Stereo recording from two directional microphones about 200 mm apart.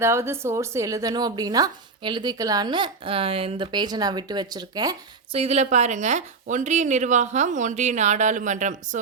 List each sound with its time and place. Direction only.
0.0 s a woman's voice: 15° right (ahead or behind)
5.4 s speech: 30° right (ahead or behind)